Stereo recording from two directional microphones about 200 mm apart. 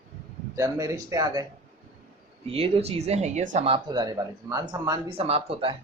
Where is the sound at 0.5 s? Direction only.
15° right (ahead or behind).